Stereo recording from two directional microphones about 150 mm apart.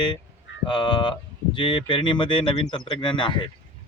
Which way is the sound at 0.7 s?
30° left (ahead or behind).